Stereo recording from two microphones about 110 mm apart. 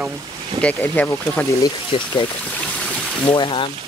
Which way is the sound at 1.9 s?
50° left (ahead or behind).